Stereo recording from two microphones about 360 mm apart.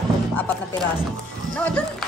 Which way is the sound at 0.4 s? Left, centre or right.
Centre.